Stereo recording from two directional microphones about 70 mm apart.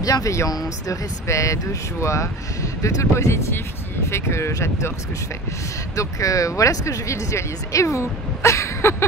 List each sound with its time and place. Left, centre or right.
0.0 s speech: left
5.9 s speech: left